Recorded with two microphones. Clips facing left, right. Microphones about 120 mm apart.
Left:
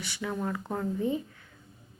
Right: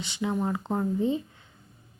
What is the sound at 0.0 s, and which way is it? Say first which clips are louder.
Speech: right 4 dB; 20° right (ahead or behind).